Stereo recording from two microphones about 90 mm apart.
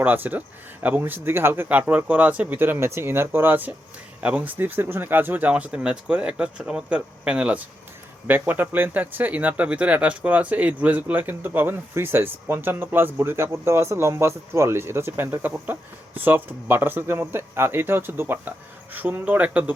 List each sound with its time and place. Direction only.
0.0 s speech: 20° right (ahead or behind)